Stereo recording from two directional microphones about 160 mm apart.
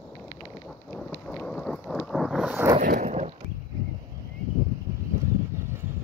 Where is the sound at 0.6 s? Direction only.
5° left (ahead or behind).